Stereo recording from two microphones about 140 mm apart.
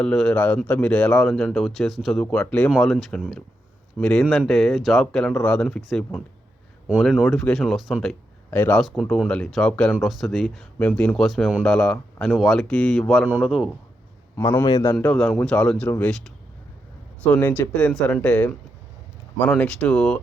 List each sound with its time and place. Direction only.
0.0 s speech: 5° left (ahead or behind)
8.4 s speech: 10° left (ahead or behind)
8.8 s speech: centre (ahead or behind)
14.6 s a man's voice: 30° left (ahead or behind)
14.9 s speech: 5° left (ahead or behind)